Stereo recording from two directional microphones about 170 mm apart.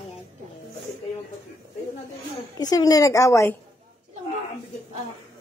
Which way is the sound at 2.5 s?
25° left (ahead or behind).